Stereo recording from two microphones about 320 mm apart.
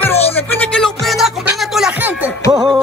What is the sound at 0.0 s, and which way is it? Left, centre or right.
Music, centre.